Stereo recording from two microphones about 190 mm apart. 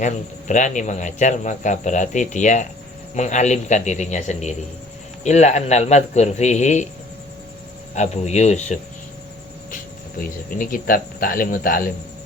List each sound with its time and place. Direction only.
0.0 s speech: 40° left (ahead or behind)
7.9 s speech: 35° left (ahead or behind)
10.2 s speech: 45° left (ahead or behind)